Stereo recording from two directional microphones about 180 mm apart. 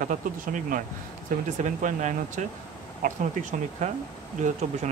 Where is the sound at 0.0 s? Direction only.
45° right (ahead or behind).